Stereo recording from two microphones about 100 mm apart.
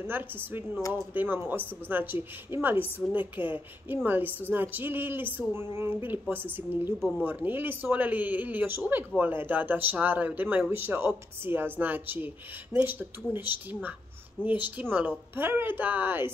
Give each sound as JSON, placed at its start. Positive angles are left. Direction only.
{"t": 0.0, "sound": "a woman's voice", "side_deg": -20}
{"t": 7.0, "sound": "speech", "side_deg": 0}
{"t": 7.2, "sound": "a woman's voice", "side_deg": -20}